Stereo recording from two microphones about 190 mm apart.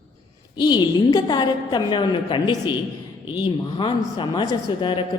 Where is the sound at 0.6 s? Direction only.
20° left (ahead or behind).